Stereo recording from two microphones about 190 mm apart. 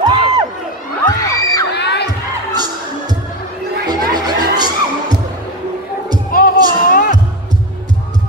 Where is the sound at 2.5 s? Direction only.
20° right (ahead or behind).